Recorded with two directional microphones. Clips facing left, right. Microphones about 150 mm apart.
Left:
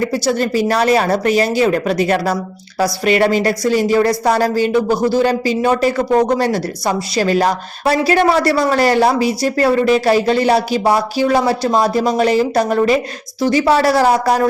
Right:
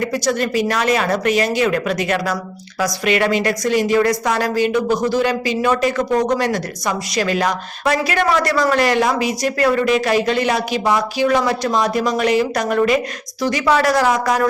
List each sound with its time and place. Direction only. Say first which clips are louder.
0.0 s a woman's voice: left 3 dB; 30° left (ahead or behind)